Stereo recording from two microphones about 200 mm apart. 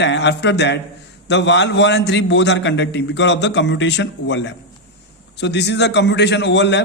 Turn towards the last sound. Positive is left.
turn(degrees=60)  # may be behind; listen again after turning